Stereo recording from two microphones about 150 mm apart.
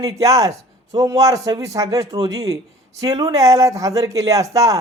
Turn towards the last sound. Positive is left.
turn(degrees=-20)  # may be behind; listen again after turning